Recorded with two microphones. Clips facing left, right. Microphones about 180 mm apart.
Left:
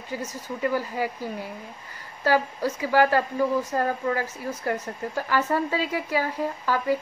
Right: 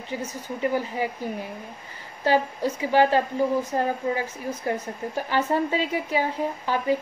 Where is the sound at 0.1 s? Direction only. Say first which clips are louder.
Right 1 dB; 20° right (ahead or behind).